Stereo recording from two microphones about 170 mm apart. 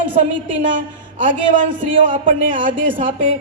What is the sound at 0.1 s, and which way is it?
A woman's voice, 50° right (ahead or behind).